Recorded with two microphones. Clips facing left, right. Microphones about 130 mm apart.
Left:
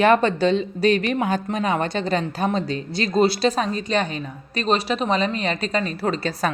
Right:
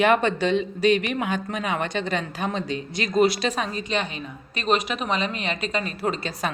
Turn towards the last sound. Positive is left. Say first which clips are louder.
# left 3 dB
turn(degrees=35)  # may be behind; listen again after turning